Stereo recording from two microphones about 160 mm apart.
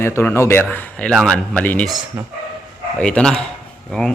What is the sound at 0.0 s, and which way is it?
Speech, 15° left (ahead or behind).